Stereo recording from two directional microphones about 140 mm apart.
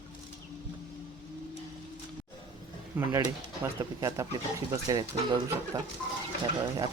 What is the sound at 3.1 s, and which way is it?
Speech, 20° right (ahead or behind).